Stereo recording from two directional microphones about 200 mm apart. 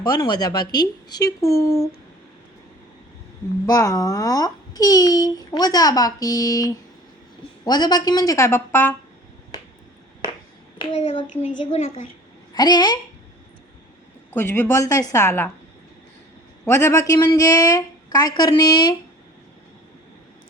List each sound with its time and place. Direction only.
0.0 s speech: 20° left (ahead or behind)
3.7 s a child's voice: 15° left (ahead or behind)
10.9 s a child's voice: 35° left (ahead or behind)
12.5 s speech: 20° left (ahead or behind)
14.3 s a child's voice: 10° left (ahead or behind)
16.6 s speech: 10° left (ahead or behind)